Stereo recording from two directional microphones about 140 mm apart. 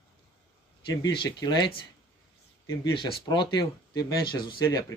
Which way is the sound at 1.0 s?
30° left (ahead or behind).